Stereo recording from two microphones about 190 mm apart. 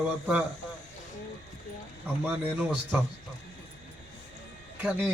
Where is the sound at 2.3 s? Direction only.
5° right (ahead or behind).